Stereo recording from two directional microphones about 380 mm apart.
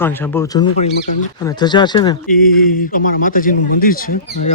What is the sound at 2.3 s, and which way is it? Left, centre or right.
A man's voice, left.